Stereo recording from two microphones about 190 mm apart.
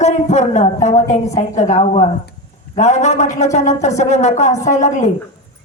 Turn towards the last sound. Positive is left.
turn(degrees=40)  # may be behind; listen again after turning